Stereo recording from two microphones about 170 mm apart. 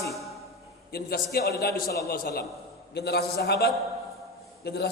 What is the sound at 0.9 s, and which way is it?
A man's voice, 65° left (ahead or behind).